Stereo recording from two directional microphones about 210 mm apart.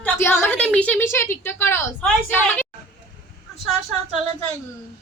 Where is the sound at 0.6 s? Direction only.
5° left (ahead or behind).